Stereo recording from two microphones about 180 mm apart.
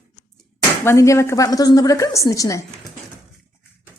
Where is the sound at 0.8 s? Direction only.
15° left (ahead or behind).